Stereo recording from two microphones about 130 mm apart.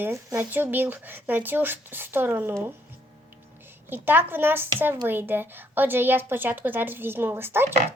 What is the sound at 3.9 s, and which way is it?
Speech, 15° right (ahead or behind).